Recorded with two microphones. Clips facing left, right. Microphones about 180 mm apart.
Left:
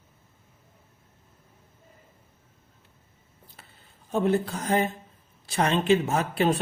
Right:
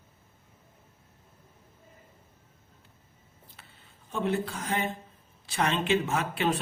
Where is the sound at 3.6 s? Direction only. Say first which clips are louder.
Left 3 dB; 40° left (ahead or behind).